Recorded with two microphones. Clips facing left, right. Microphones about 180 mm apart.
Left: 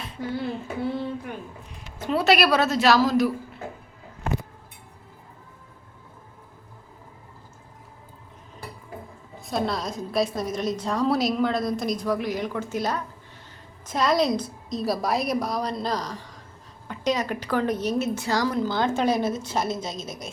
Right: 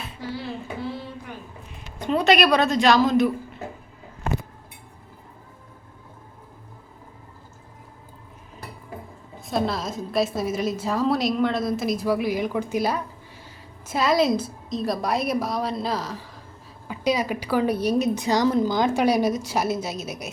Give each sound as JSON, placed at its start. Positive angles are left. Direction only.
{"t": 0.2, "sound": "a sound", "side_deg": 55}
{"t": 2.0, "sound": "a woman's voice", "side_deg": 5}
{"t": 9.5, "sound": "a woman's voice", "side_deg": 0}